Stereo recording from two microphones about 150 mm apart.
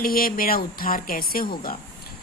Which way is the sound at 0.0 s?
75° left (ahead or behind).